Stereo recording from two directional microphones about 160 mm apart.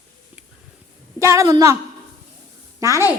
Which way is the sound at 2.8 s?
15° right (ahead or behind).